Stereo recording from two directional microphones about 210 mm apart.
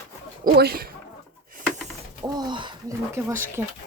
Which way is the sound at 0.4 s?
45° right (ahead or behind).